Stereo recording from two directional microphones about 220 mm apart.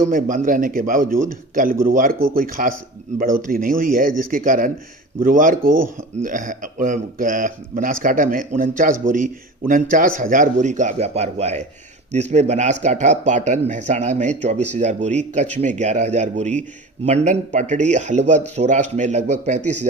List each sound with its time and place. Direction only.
0.1 s a man's voice: 40° right (ahead or behind)